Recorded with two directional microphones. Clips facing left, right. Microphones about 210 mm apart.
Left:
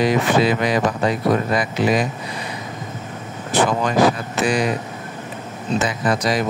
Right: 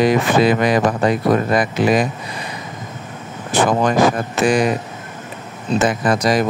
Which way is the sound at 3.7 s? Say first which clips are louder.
Right 3 dB; 50° right (ahead or behind).